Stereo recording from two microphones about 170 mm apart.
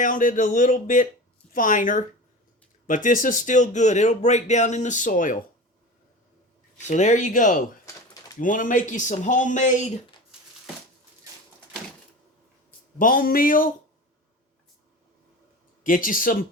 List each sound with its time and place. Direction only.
0.0 s speech: 50° left (ahead or behind)
6.7 s speech: 45° left (ahead or behind)
13.0 s speech: 55° left (ahead or behind)
15.8 s speech: 55° left (ahead or behind)